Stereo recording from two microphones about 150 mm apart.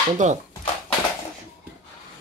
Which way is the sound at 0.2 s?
55° right (ahead or behind).